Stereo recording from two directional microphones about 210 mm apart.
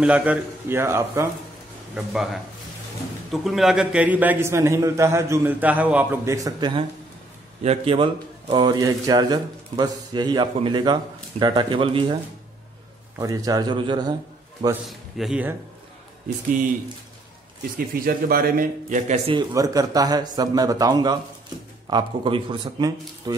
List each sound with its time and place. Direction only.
0.0 s a man's voice: 5° right (ahead or behind); by 12.2 s 25° right (ahead or behind)
13.2 s speech: 15° right (ahead or behind)
14.9 s a man's voice: centre (ahead or behind)
17.7 s a man's voice: 45° right (ahead or behind)
19.5 s a man's voice: 15° right (ahead or behind)